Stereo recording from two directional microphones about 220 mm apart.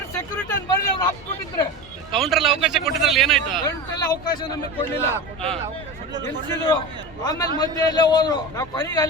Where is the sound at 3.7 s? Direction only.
20° left (ahead or behind).